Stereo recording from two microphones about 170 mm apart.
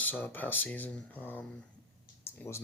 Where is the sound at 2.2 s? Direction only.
15° left (ahead or behind).